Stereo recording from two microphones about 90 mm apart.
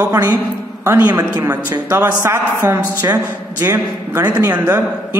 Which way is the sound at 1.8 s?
25° right (ahead or behind).